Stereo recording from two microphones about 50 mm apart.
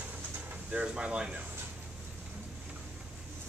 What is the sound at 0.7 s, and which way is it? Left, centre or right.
Speech, right.